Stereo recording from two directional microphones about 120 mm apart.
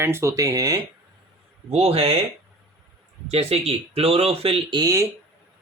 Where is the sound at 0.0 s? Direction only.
20° right (ahead or behind).